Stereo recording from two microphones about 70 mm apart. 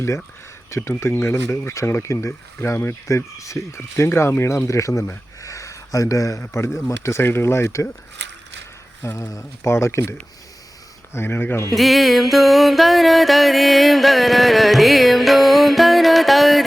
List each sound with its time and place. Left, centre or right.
0.8 s speech: left
3.3 s speech: left
4.6 s speech: left
5.4 s a sound: left
6.5 s speech: left
9.1 s speech: left
9.4 s speech: left
11.7 s music: centre